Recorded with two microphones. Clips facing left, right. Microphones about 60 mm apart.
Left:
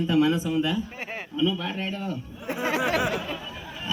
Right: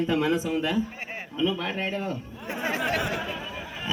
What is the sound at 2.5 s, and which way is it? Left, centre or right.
Speech, centre.